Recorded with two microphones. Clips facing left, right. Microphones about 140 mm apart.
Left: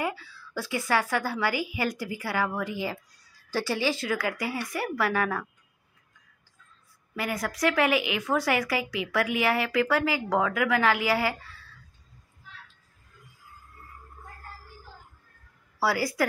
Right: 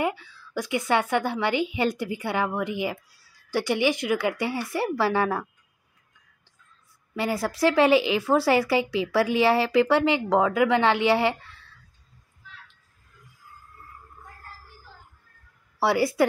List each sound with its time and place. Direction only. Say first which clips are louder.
0.0 s speech: right 4 dB; 20° right (ahead or behind)
7.2 s speech: right 4 dB; 30° right (ahead or behind)
15.8 s speech: right 5 dB; 25° right (ahead or behind)